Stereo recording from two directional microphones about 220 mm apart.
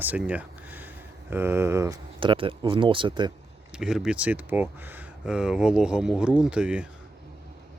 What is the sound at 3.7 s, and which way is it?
Speech, 5° right (ahead or behind).